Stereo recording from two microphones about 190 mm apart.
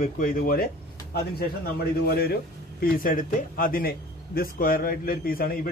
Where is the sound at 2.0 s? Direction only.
55° left (ahead or behind).